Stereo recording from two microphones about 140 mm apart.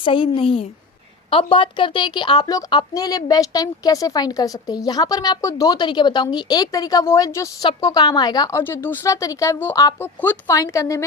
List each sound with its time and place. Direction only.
0.0 s a woman's voice: 40° left (ahead or behind)
8.6 s a woman's voice: 15° left (ahead or behind)